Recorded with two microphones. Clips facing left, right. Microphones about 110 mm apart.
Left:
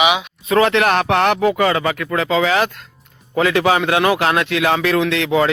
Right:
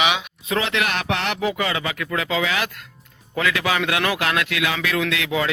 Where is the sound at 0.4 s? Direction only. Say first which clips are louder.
Left 9 dB; 50° left (ahead or behind).